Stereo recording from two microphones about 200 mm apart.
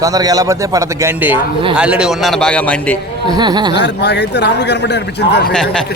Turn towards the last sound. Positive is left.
turn(degrees=5)  # may be behind; listen again after turning